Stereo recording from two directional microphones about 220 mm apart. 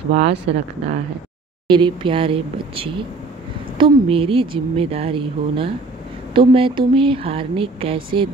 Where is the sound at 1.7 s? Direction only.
20° right (ahead or behind).